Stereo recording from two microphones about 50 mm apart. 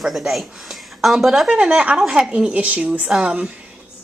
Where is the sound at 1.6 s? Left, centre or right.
Right.